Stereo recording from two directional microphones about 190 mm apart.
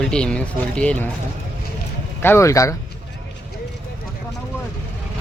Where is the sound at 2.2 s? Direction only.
15° left (ahead or behind).